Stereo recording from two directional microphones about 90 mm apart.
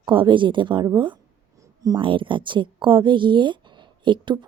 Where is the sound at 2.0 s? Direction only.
70° right (ahead or behind).